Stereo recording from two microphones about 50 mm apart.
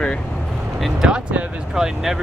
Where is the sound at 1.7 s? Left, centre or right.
Centre.